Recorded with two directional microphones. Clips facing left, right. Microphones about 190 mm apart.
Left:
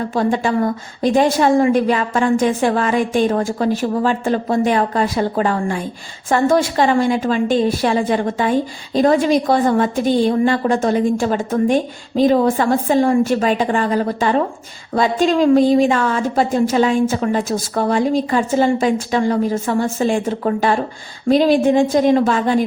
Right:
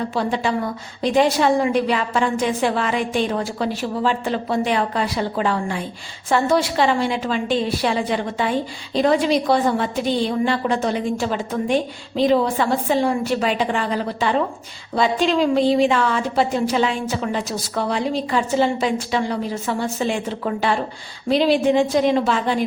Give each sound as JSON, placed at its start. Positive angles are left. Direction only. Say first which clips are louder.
{"t": 0.1, "sound": "a woman's voice", "louder": "left 4 dB", "side_deg": 50}